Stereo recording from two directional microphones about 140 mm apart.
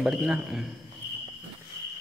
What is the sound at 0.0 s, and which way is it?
Speech, 5° right (ahead or behind).